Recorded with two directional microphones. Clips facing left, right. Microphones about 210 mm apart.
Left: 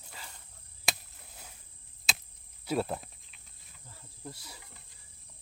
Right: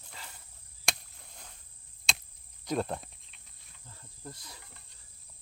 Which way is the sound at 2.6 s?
5° left (ahead or behind).